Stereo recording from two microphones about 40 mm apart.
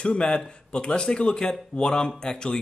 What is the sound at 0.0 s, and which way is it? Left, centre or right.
Speech, left.